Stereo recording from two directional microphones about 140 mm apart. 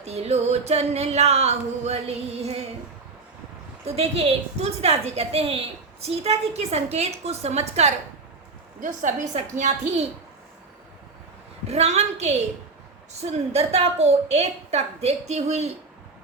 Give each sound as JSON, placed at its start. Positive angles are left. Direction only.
{"t": 0.0, "sound": "a woman's voice", "side_deg": -50}
{"t": 3.8, "sound": "a woman's voice", "side_deg": -45}
{"t": 8.8, "sound": "a woman's voice", "side_deg": -60}
{"t": 11.7, "sound": "a woman's voice", "side_deg": -50}